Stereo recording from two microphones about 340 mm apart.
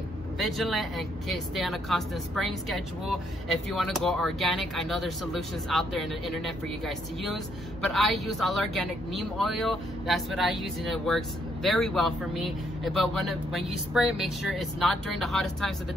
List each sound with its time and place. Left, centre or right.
0.4 s speech: centre